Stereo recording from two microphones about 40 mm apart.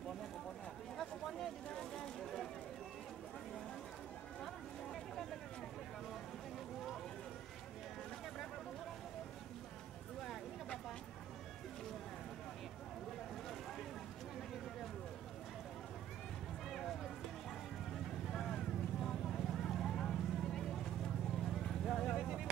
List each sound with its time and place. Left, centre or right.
1.7 s vehicle: centre
18.3 s vehicle: centre
22.1 s vehicle: centre